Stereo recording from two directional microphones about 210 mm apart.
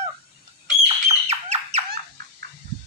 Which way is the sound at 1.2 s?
30° right (ahead or behind).